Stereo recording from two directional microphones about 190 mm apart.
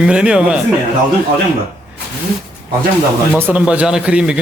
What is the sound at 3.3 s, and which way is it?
Speech, 5° right (ahead or behind).